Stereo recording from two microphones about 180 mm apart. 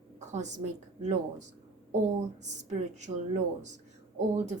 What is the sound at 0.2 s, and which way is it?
Speech, 40° right (ahead or behind).